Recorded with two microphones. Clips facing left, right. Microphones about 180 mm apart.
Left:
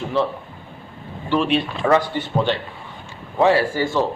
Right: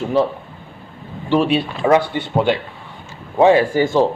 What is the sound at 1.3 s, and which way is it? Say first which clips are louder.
Speech: right 3 dB; 10° right (ahead or behind).